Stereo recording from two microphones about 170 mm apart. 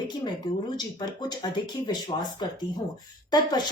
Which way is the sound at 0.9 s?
25° left (ahead or behind).